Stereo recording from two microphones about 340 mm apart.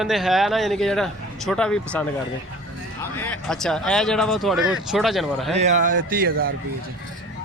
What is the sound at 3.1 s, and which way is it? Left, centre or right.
Speech, centre.